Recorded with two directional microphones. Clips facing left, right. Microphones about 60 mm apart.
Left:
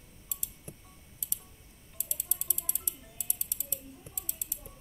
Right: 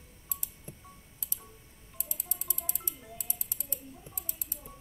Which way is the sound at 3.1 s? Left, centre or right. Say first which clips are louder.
Right 3 dB; right.